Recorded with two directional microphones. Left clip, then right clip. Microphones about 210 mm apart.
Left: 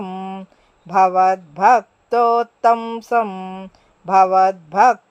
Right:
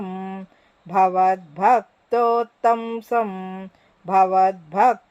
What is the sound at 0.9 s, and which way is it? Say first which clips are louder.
Speech: left 3 dB; 20° left (ahead or behind).